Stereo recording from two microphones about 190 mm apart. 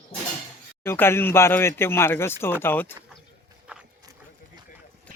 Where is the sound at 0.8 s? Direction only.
10° left (ahead or behind).